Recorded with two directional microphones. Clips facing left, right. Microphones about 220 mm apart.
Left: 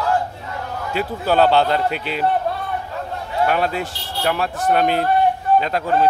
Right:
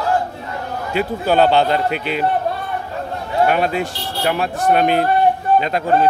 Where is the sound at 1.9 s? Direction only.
55° right (ahead or behind).